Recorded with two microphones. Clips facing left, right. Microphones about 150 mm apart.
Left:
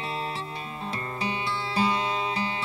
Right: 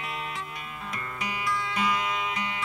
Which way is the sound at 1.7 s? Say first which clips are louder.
Left 5 dB; 30° left (ahead or behind).